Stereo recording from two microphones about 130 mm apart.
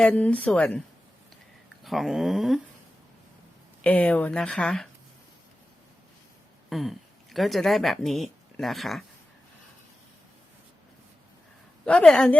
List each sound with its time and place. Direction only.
0.0 s speech: 10° left (ahead or behind)
1.8 s speech: centre (ahead or behind)
3.8 s speech: 10° left (ahead or behind)
6.7 s a woman's voice: centre (ahead or behind)
11.9 s speech: 5° left (ahead or behind)